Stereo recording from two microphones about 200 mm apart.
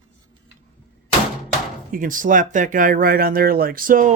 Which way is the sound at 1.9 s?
40° right (ahead or behind).